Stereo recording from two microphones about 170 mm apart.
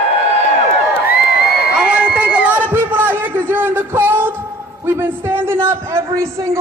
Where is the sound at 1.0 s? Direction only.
65° left (ahead or behind).